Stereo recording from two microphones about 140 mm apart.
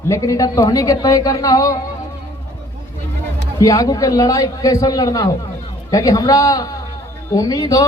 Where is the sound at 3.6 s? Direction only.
25° left (ahead or behind).